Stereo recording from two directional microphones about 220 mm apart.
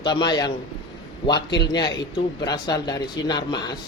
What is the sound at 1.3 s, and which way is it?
Speech, 50° left (ahead or behind).